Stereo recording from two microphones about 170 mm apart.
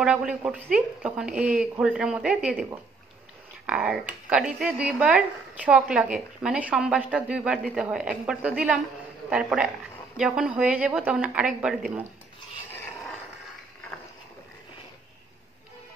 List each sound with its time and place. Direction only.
0.0 s a woman's voice: 5° right (ahead or behind)